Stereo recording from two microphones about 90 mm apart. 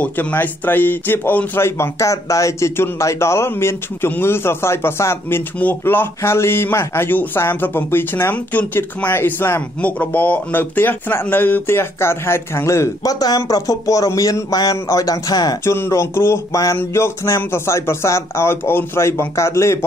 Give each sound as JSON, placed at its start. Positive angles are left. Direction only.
{"t": 0.0, "sound": "a man's voice", "side_deg": 20}
{"t": 15.6, "sound": "a man's voice", "side_deg": 30}